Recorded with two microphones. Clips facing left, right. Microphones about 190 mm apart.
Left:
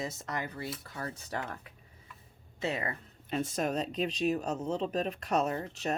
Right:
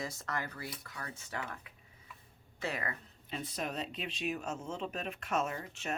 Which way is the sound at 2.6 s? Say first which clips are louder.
Left 4 dB; 25° left (ahead or behind).